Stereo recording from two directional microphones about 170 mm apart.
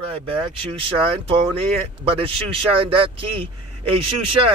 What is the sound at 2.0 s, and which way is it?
Speech, 35° right (ahead or behind).